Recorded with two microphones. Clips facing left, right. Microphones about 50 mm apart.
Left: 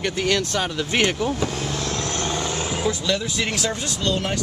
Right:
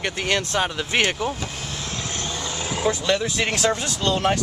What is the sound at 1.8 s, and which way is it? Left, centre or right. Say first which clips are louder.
Vehicle: left 4 dB; left.